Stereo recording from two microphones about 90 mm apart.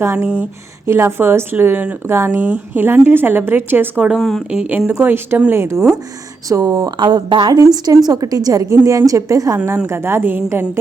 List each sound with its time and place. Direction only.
0.0 s a woman's voice: 30° right (ahead or behind)
4.2 s speech: 5° left (ahead or behind)
4.5 s speech: 15° right (ahead or behind)
4.9 s a woman's voice: 25° right (ahead or behind)
6.5 s speech: 40° right (ahead or behind)
6.7 s a woman's voice: 55° right (ahead or behind); by 9.6 s 40° right (ahead or behind)
9.6 s a woman's voice: 30° right (ahead or behind)